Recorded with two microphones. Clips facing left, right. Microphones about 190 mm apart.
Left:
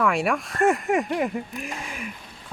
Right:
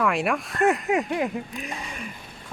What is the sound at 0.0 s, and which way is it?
Speech, centre (ahead or behind).